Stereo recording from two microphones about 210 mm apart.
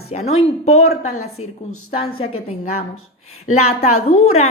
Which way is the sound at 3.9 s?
90° left.